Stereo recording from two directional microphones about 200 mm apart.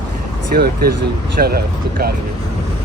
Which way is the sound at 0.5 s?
50° right (ahead or behind).